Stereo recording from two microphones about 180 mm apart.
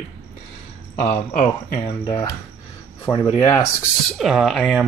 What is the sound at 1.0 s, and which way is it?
Speech, 30° left (ahead or behind).